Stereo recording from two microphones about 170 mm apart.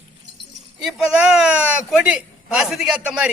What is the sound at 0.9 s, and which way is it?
A man's voice, 5° right (ahead or behind).